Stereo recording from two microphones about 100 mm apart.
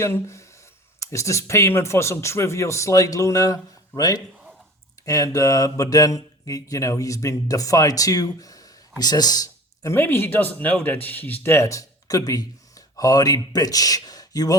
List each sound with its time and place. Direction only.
0.0 s speech: 30° left (ahead or behind)
9.9 s speech: 25° left (ahead or behind); by 14.5 s 40° left (ahead or behind)